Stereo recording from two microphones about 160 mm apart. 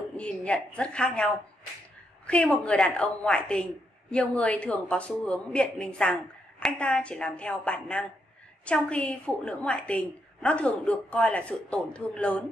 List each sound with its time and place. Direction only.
0.2 s a woman's voice: 10° left (ahead or behind)